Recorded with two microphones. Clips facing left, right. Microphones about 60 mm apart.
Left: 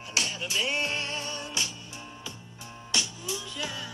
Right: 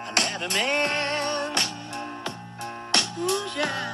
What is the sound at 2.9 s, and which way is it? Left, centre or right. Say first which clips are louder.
Music: right 8 dB; right.